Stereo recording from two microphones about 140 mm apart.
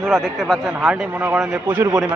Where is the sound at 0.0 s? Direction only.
Centre (ahead or behind).